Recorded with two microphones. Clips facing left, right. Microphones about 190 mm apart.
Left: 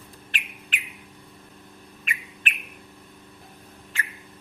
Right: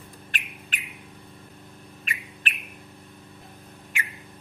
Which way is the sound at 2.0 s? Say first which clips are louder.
Left 1 dB; 35° right (ahead or behind).